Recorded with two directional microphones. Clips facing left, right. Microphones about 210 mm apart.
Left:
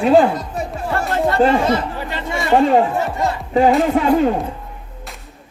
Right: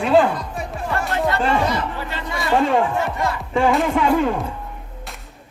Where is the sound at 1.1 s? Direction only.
40° left (ahead or behind).